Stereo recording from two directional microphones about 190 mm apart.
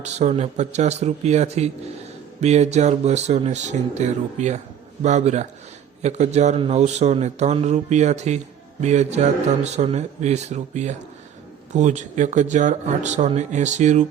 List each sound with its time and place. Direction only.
0.0 s speech: 35° right (ahead or behind)